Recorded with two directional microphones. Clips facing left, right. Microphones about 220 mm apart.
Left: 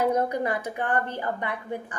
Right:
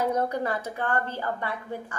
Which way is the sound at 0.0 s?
10° left (ahead or behind).